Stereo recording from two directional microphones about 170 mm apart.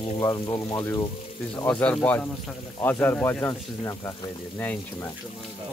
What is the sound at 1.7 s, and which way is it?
Speech, 5° left (ahead or behind).